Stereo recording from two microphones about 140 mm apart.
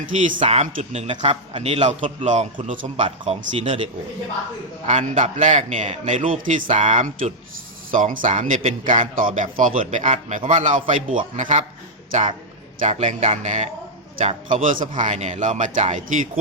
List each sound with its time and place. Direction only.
0.1 s a man's voice: 65° right (ahead or behind)
0.3 s a man's voice: 45° right (ahead or behind)
4.9 s a man's voice: 55° right (ahead or behind)
7.9 s a man's voice: 70° right (ahead or behind)
14.2 s a man's voice: 40° right (ahead or behind)
14.5 s a man's voice: 65° right (ahead or behind)